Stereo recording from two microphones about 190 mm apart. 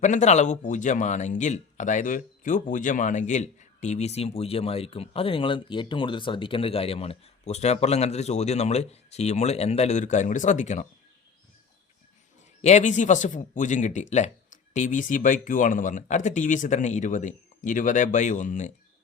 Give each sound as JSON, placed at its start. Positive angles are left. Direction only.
{"t": 0.0, "sound": "speech", "side_deg": 40}
{"t": 12.6, "sound": "speech", "side_deg": 40}